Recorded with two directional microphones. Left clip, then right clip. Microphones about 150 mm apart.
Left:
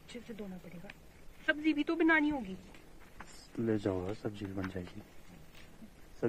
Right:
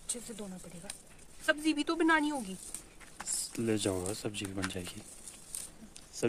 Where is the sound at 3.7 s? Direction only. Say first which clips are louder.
Right 1 dB; 25° right (ahead or behind).